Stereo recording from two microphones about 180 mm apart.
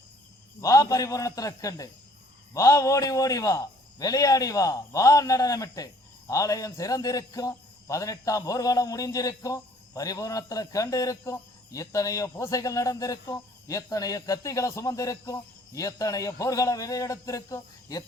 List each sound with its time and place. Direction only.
0.6 s a man's voice: 20° left (ahead or behind)